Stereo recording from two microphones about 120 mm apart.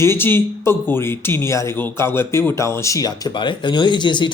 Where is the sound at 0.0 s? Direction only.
20° left (ahead or behind).